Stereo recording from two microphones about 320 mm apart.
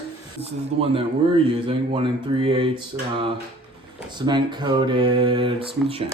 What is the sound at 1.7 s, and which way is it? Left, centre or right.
A man's voice, centre.